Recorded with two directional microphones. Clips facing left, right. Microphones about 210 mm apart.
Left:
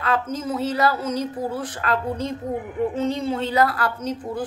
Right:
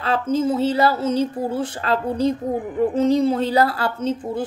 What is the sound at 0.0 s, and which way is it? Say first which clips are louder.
A woman's voice: right 5 dB; 30° right (ahead or behind).